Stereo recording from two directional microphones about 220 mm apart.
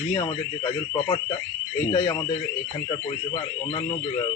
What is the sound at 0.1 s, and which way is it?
Speech, 20° left (ahead or behind).